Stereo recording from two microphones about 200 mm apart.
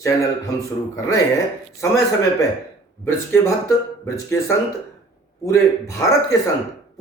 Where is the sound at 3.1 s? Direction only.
15° left (ahead or behind).